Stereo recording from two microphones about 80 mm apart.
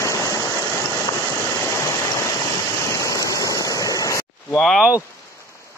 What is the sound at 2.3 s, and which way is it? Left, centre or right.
Vehicle, left.